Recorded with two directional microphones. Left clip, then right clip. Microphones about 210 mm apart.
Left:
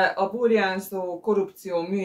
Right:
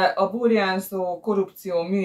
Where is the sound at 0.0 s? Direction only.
Centre (ahead or behind).